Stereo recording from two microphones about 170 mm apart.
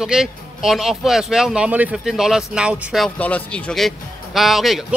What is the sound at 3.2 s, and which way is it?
Speech, 10° left (ahead or behind).